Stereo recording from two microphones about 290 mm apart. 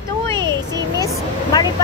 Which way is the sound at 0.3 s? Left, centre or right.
Centre.